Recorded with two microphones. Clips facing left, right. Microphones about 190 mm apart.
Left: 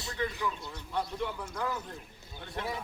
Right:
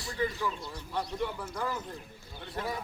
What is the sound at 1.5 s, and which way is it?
A man's voice, 5° right (ahead or behind).